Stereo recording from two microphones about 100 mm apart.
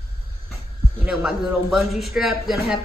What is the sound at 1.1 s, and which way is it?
Speech, 5° right (ahead or behind).